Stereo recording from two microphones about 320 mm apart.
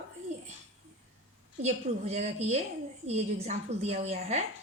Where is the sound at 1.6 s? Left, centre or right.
Centre.